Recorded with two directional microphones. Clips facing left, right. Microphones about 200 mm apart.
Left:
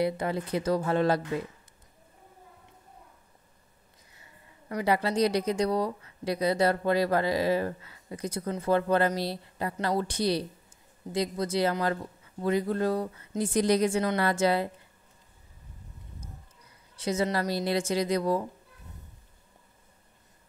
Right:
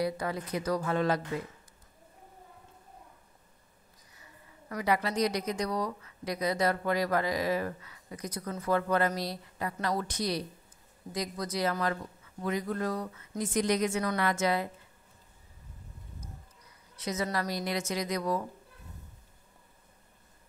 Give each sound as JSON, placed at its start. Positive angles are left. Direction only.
{"t": 0.0, "sound": "speech", "side_deg": 25}
{"t": 4.2, "sound": "a woman's voice", "side_deg": 25}
{"t": 16.9, "sound": "speech", "side_deg": 30}